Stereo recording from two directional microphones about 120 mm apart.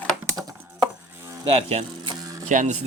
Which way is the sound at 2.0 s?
30° right (ahead or behind).